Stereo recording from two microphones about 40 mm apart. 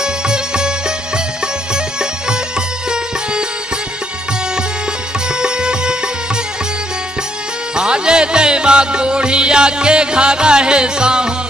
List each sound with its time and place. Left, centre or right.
0.0 s music: centre
5.3 s music: right
7.7 s music: right